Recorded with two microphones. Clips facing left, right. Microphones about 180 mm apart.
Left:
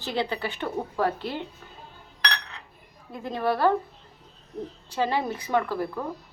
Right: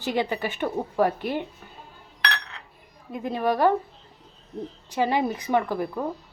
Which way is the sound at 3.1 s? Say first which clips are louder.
Right 2 dB; 15° right (ahead or behind).